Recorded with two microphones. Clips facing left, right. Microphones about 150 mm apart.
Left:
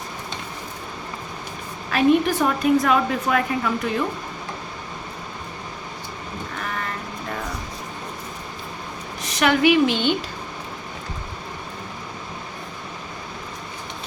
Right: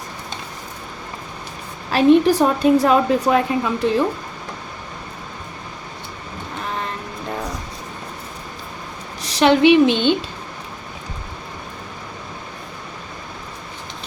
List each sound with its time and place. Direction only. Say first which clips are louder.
1.9 s a woman's voice: right 5 dB; 35° right (ahead or behind)
9.2 s a woman's voice: right 5 dB; 30° right (ahead or behind)